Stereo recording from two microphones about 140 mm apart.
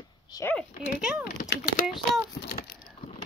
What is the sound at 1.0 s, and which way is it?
A child's voice, 5° right (ahead or behind).